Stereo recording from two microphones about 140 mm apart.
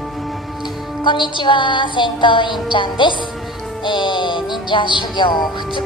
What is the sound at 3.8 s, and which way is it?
Music, 35° left (ahead or behind).